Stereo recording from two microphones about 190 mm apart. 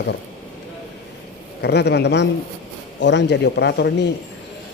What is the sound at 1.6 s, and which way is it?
A man's voice, 60° left (ahead or behind).